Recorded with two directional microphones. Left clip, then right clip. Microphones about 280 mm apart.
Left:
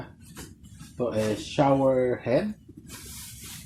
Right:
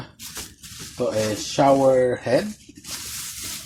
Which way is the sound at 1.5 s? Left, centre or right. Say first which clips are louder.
Right 6 dB; right.